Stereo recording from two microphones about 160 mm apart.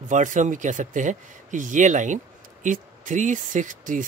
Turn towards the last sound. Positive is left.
turn(degrees=-55)  # may be behind; listen again after turning